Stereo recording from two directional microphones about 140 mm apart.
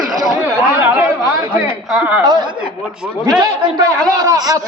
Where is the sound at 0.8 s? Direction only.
10° right (ahead or behind).